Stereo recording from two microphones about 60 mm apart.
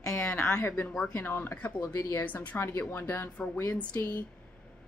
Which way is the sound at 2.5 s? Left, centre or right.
Left.